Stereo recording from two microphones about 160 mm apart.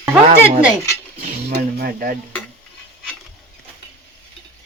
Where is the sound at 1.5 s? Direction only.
80° right.